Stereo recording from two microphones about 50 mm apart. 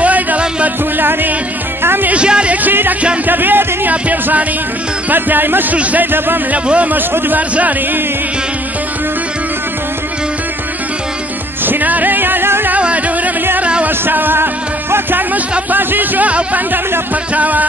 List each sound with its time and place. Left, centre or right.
0.0 s music: right
2.0 s music: right
2.5 s music: right
3.9 s speech: right
5.8 s speech: right
6.1 s music: right
6.5 s speech: right
7.0 s speech: right
11.6 s music: right
12.7 s music: right
13.8 s music: right
15.7 s speech: right